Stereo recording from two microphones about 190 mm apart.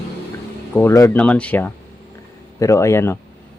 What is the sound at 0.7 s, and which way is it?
Speech, 15° left (ahead or behind).